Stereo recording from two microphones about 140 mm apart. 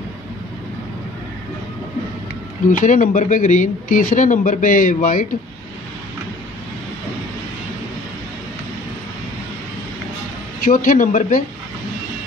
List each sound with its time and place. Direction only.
2.8 s speech: 65° left (ahead or behind)
10.6 s speech: 75° left (ahead or behind)